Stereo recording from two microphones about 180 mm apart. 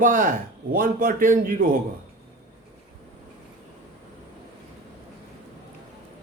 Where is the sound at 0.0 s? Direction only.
50° right (ahead or behind).